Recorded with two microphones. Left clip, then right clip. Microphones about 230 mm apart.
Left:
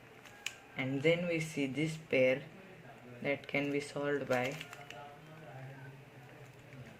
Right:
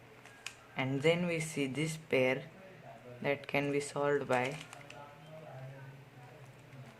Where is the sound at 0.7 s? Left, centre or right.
Right.